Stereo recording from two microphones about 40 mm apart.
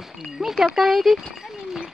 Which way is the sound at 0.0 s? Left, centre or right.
Centre.